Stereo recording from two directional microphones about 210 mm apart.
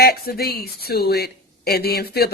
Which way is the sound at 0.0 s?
45° left (ahead or behind).